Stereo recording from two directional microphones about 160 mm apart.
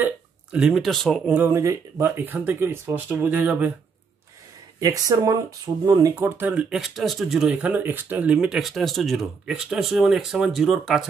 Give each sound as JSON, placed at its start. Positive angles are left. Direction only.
{"t": 0.0, "sound": "speech", "side_deg": -5}
{"t": 1.3, "sound": "speech", "side_deg": -15}
{"t": 4.7, "sound": "speech", "side_deg": -20}